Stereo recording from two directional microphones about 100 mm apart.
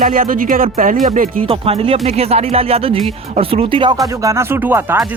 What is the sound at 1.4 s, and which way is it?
Speech, 70° right (ahead or behind).